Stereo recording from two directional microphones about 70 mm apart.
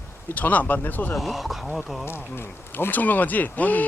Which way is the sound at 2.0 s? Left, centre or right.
Left.